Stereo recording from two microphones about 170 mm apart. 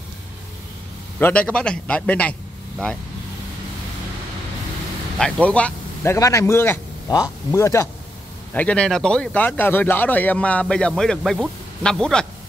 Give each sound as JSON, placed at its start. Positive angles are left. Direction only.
{"t": 1.2, "sound": "a man's voice", "side_deg": 5}
{"t": 5.2, "sound": "speech", "side_deg": 5}
{"t": 6.1, "sound": "a man's voice", "side_deg": 20}
{"t": 8.5, "sound": "speech", "side_deg": 5}